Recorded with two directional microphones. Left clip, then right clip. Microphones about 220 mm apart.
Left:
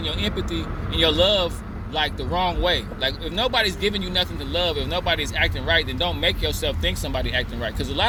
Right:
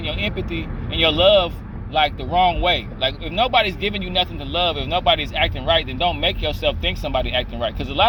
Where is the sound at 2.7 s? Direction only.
50° left (ahead or behind).